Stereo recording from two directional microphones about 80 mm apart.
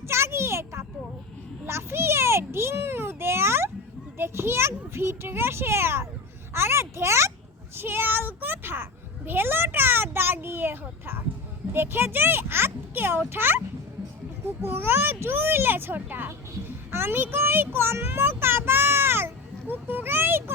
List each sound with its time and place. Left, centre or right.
0.1 s a sound: right
4.2 s a child's voice: right
14.6 s a child's voice: right